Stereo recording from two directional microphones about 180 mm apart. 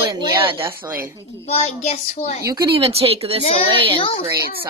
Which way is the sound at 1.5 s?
35° left (ahead or behind).